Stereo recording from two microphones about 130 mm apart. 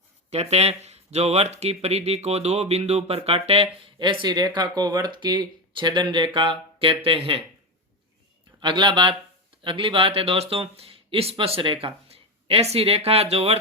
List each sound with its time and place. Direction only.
0.3 s speech: 55° right (ahead or behind)
3.9 s speech: 35° right (ahead or behind)
8.6 s speech: 40° right (ahead or behind); by 13.6 s 55° right (ahead or behind)